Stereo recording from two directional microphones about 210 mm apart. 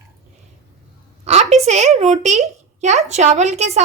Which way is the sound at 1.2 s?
30° right (ahead or behind).